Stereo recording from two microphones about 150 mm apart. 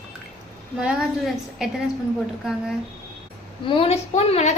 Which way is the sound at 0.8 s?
Centre (ahead or behind).